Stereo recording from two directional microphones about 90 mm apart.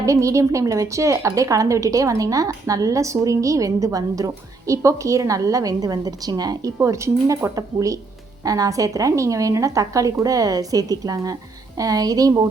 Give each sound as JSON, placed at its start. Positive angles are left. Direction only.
{"t": 0.0, "sound": "a woman's voice", "side_deg": -35}